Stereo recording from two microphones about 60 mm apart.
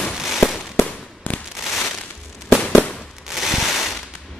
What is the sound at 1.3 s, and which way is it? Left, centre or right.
Fireworks, left.